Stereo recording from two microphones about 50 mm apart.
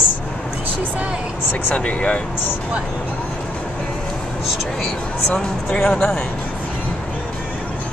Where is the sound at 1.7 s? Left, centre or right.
Left.